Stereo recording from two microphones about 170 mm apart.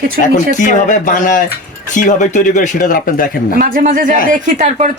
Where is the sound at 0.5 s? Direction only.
50° left (ahead or behind).